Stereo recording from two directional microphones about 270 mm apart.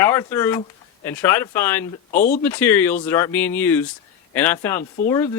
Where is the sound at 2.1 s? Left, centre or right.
Left.